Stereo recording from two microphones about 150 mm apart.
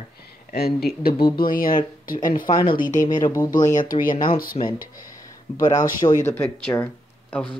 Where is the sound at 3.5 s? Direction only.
60° left (ahead or behind).